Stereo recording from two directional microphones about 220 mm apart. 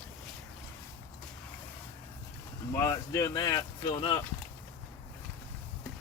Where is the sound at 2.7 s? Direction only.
15° left (ahead or behind).